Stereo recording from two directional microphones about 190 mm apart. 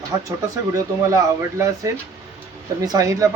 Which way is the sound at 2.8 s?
20° right (ahead or behind).